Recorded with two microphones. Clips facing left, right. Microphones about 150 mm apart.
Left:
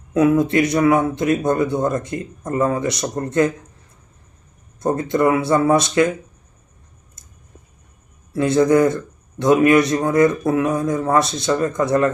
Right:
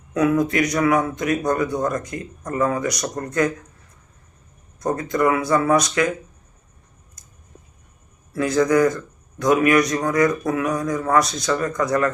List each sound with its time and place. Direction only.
0.1 s speech: 25° left (ahead or behind)
4.8 s speech: 25° left (ahead or behind)
7.2 s a sound: 25° left (ahead or behind)
8.3 s speech: 25° left (ahead or behind)